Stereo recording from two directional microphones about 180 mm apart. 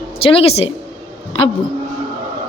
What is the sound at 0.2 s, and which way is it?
Speech, 30° left (ahead or behind).